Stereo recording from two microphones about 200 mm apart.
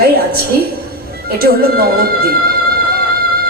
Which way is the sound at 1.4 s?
50° right (ahead or behind).